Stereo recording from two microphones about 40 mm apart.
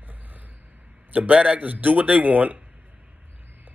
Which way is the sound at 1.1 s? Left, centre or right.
Right.